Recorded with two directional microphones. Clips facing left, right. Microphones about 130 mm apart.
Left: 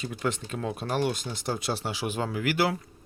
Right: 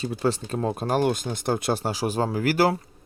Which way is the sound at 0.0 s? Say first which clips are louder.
Right 5 dB; 30° right (ahead or behind).